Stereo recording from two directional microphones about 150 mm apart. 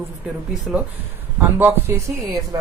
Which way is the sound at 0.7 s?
Centre (ahead or behind).